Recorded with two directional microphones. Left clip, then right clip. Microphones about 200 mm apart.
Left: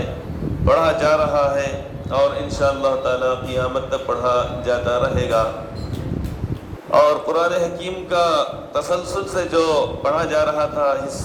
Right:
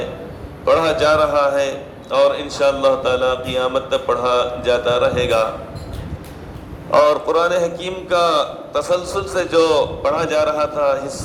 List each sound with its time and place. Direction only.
0.6 s a man's voice: 35° right (ahead or behind)
6.9 s a man's voice: 35° right (ahead or behind)